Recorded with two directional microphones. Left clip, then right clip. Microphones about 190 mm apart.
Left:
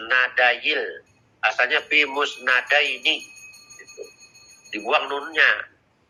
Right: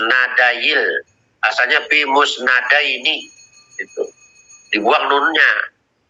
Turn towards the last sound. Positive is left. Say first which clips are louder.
# right 6 dB
turn(degrees=-40)  # may be behind; listen again after turning